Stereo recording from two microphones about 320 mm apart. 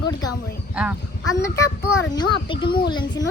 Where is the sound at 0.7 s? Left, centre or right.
Centre.